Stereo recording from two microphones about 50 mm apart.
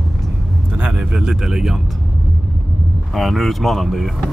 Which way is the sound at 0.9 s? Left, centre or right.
Centre.